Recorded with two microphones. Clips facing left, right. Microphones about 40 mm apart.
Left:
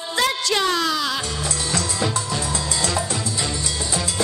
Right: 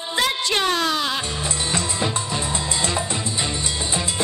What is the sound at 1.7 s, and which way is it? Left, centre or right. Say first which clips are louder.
Music: left 1 dB; right.